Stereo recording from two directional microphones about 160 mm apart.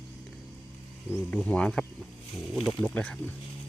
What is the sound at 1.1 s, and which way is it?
Speech, 10° left (ahead or behind).